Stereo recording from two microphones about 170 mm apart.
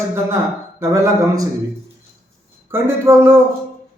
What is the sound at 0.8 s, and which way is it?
Speech, 20° right (ahead or behind).